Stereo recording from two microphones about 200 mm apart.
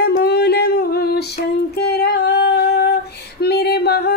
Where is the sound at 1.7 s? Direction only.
55° left (ahead or behind).